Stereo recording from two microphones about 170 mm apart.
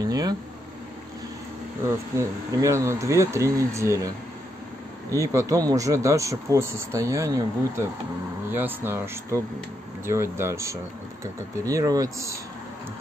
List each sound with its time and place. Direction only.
0.0 s a sound: 20° right (ahead or behind)
1.9 s speech: 15° right (ahead or behind)
5.1 s speech: 15° right (ahead or behind)